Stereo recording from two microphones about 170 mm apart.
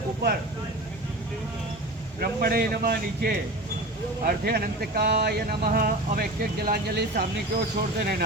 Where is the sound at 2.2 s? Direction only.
65° right (ahead or behind).